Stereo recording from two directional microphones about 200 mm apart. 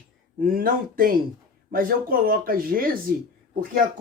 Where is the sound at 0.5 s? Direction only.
45° right (ahead or behind).